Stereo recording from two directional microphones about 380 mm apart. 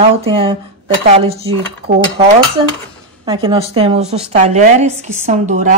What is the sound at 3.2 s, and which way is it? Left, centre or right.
A woman's voice, centre.